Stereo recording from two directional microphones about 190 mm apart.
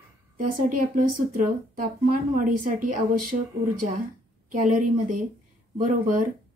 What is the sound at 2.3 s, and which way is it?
Speech, 45° right (ahead or behind).